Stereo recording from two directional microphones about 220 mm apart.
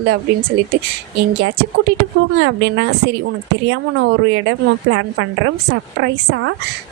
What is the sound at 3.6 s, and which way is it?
Speech, 65° right (ahead or behind).